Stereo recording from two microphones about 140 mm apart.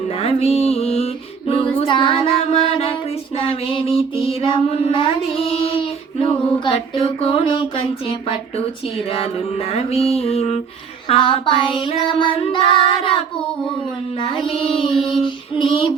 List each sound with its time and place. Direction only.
0.2 s female singing: 45° left (ahead or behind)
3.3 s child singing: 45° left (ahead or behind)
6.7 s music: 40° left (ahead or behind)
9.1 s music: 45° left (ahead or behind)
11.1 s child singing: 40° left (ahead or behind)